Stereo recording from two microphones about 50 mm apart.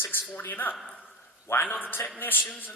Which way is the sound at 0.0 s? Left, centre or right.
Left.